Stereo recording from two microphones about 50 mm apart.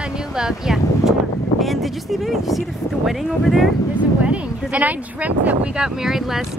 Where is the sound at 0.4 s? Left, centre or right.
Centre.